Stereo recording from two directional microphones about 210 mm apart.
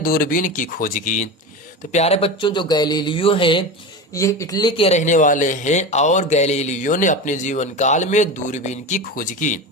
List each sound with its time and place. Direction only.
0.0 s speech: 45° left (ahead or behind)